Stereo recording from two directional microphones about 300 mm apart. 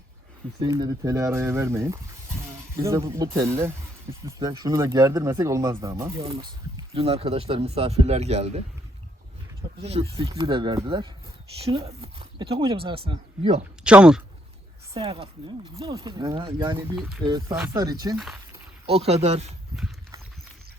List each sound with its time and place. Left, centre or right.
0.6 s speech: centre
9.8 s speech: centre
13.8 s speech: centre
14.9 s speech: centre
19.7 s clip-clop: centre